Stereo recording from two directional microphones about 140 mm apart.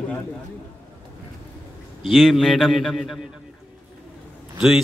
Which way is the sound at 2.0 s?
Centre (ahead or behind).